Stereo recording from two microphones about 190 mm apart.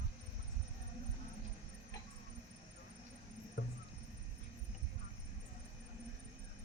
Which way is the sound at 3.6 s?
60° left (ahead or behind).